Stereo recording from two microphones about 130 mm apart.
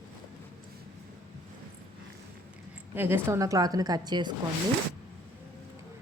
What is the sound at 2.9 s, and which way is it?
A woman's voice, 15° right (ahead or behind).